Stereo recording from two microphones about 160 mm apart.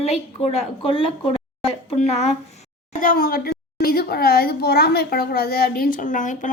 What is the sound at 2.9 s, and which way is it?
A child's voice, 55° left (ahead or behind).